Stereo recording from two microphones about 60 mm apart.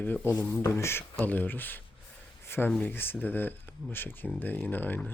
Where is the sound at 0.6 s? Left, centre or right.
Left.